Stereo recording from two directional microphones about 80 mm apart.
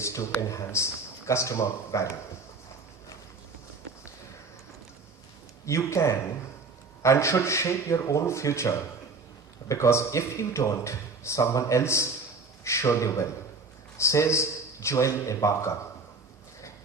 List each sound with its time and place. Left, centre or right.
0.0 s speech: left
5.6 s speech: left